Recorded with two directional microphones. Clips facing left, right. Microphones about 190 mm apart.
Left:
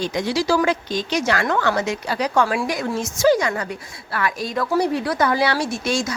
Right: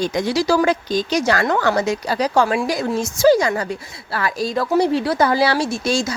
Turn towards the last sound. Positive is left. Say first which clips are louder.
# right 2 dB
turn(degrees=-30)  # may be behind; listen again after turning